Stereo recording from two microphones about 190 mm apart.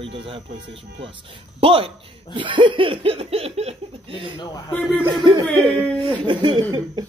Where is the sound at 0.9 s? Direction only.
30° right (ahead or behind).